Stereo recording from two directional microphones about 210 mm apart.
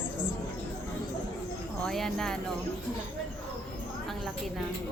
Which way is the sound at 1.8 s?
Centre (ahead or behind).